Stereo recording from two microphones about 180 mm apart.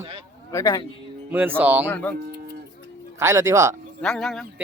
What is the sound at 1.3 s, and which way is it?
Speech, 10° right (ahead or behind).